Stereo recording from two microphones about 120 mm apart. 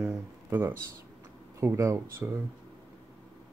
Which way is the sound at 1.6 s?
20° right (ahead or behind).